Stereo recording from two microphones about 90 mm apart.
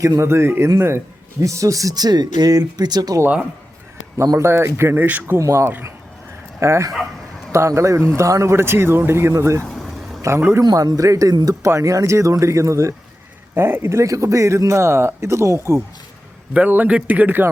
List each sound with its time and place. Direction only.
0.2 s a man's voice: 30° right (ahead or behind); by 3.2 s 50° right (ahead or behind)
4.2 s speech: 30° right (ahead or behind)
5.4 s a man's voice: 30° right (ahead or behind)
9.6 s vehicle: centre (ahead or behind)
10.2 s a man's voice: 30° right (ahead or behind)
10.6 s a man's voice: 45° right (ahead or behind); by 15.8 s 30° right (ahead or behind)
16.6 s speech: 20° right (ahead or behind)